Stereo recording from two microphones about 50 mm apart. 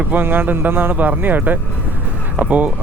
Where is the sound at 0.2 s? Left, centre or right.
Right.